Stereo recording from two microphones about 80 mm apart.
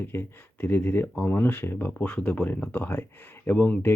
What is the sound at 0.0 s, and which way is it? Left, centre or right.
Speech, left.